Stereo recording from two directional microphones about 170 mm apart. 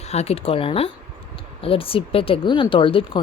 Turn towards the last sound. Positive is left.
turn(degrees=30)  # may be behind; listen again after turning